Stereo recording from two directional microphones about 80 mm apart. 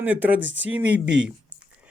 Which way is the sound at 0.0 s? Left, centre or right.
Centre.